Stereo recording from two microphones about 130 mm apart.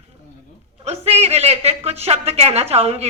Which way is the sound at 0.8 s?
50° right (ahead or behind).